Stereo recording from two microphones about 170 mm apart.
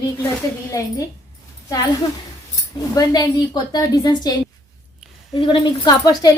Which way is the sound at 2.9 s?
20° left (ahead or behind).